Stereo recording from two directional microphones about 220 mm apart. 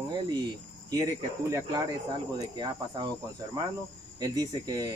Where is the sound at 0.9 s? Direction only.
15° right (ahead or behind).